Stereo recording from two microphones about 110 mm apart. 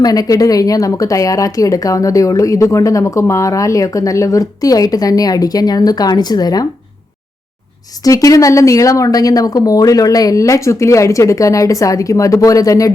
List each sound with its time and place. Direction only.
0.0 s speech: 35° left (ahead or behind)
8.0 s speech: 30° left (ahead or behind)